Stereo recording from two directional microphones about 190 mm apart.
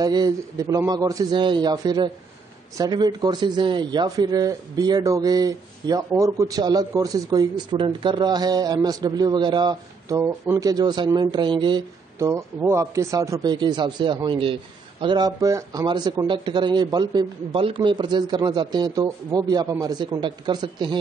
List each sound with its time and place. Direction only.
0.0 s speech: 20° right (ahead or behind)